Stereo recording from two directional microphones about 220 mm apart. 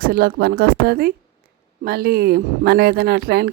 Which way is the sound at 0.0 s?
45° right (ahead or behind).